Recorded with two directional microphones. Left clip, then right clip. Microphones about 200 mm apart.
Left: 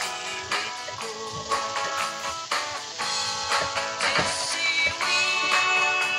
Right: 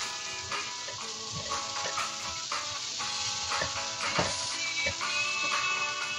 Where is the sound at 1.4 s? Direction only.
40° left (ahead or behind).